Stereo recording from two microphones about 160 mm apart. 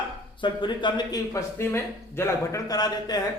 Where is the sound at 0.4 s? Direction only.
30° left (ahead or behind).